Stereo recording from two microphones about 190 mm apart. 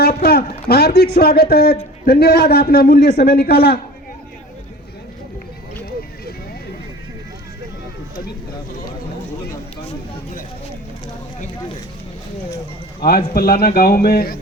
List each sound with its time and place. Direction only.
0.0 s speech: 55° left (ahead or behind)
13.1 s a man's voice: 50° left (ahead or behind)